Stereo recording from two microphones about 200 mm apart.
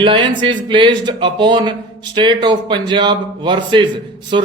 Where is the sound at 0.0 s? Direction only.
25° right (ahead or behind).